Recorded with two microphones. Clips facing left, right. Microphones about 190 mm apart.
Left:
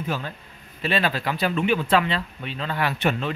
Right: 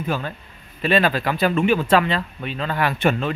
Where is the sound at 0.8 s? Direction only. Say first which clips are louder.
Right 5 dB; 50° right (ahead or behind).